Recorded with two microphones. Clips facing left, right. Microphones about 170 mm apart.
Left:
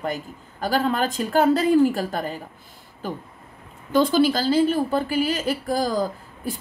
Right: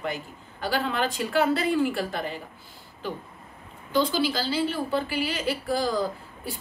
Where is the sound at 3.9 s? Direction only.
50° left (ahead or behind).